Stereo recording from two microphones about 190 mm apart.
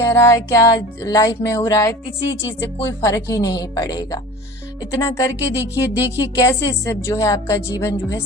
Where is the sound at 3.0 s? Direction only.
15° left (ahead or behind).